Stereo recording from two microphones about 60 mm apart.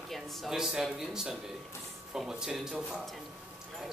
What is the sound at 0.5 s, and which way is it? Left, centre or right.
Speech, centre.